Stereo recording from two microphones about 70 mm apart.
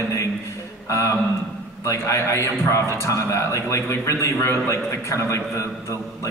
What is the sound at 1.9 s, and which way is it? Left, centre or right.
A man's voice, left.